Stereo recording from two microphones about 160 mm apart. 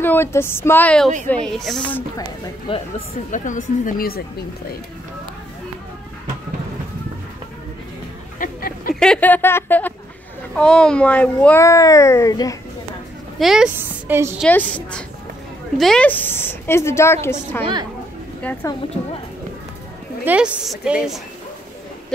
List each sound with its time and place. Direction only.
0.0 s speech: 15° left (ahead or behind)
2.7 s speech: 35° left (ahead or behind)
3.3 s speech: 50° left (ahead or behind)
8.4 s a sound: 65° left (ahead or behind)
9.0 s speech: 10° left (ahead or behind)
13.4 s a woman's voice: 5° right (ahead or behind)
15.8 s a woman's voice: 5° left (ahead or behind)
20.2 s a woman's voice: 5° right (ahead or behind)